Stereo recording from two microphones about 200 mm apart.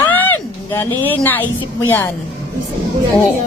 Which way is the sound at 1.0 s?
10° left (ahead or behind).